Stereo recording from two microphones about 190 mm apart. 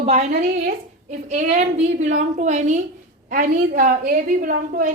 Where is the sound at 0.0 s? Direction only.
35° right (ahead or behind).